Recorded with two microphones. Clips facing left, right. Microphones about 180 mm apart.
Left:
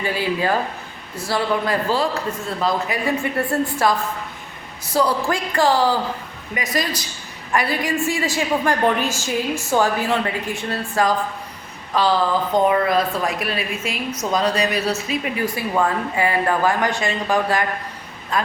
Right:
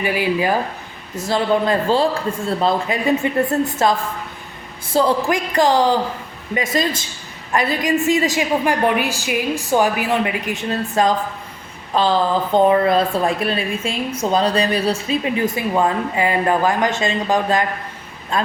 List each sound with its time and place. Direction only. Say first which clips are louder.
0.0 s speech: right 3 dB; 15° right (ahead or behind)
1.3 s a woman's voice: right 4 dB; 25° right (ahead or behind)
12.5 s a woman's voice: right 4 dB; 30° right (ahead or behind)